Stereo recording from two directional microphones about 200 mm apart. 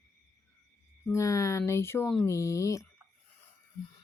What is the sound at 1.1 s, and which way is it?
Speech, 15° left (ahead or behind).